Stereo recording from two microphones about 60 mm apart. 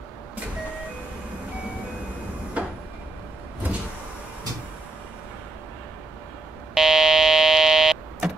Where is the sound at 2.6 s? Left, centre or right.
Right.